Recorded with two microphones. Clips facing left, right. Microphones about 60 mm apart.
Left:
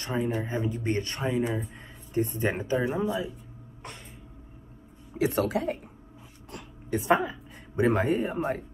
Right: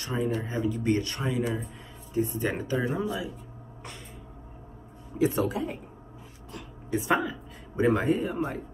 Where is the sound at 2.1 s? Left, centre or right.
Left.